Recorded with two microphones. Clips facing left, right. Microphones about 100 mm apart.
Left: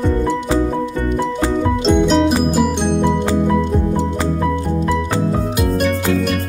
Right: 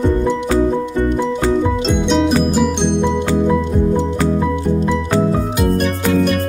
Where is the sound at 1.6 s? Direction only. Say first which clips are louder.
Left 2 dB; centre (ahead or behind).